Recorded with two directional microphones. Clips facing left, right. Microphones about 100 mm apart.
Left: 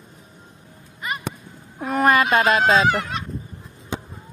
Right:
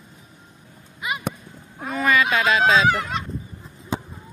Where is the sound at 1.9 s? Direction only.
50° left (ahead or behind).